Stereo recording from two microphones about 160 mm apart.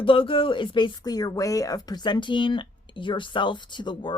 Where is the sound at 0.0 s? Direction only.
35° left (ahead or behind).